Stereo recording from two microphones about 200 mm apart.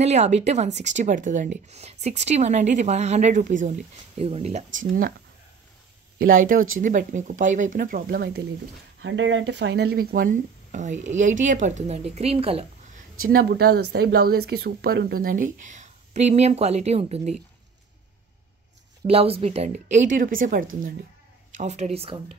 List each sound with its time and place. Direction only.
0.0 s speech: 35° right (ahead or behind)
4.7 s speech: 45° right (ahead or behind)
6.4 s speech: 45° right (ahead or behind)
9.0 s speech: 65° right (ahead or behind); by 12.6 s 30° right (ahead or behind)
13.3 s speech: 50° right (ahead or behind); by 17.4 s 30° right (ahead or behind)
19.0 s speech: 30° right (ahead or behind)